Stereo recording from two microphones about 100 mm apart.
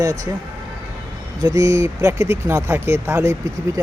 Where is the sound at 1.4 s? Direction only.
30° right (ahead or behind).